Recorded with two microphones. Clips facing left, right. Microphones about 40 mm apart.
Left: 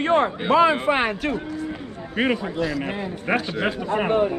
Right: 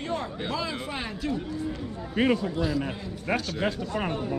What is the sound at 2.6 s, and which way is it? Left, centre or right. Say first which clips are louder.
Speech: left 3 dB; left.